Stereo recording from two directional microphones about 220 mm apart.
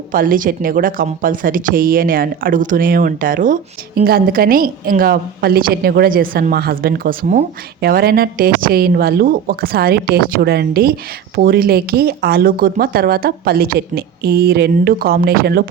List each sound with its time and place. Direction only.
0.1 s speech: 40° right (ahead or behind)